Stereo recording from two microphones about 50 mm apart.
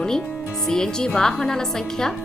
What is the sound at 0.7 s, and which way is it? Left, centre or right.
Speech, centre.